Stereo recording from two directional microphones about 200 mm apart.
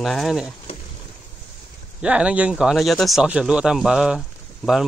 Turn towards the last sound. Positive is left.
turn(degrees=0)  # may be behind; listen again after turning